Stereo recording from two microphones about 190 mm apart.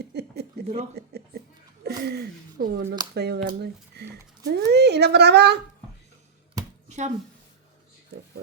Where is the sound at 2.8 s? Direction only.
20° right (ahead or behind).